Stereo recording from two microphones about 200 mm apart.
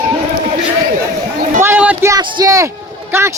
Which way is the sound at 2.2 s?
20° right (ahead or behind).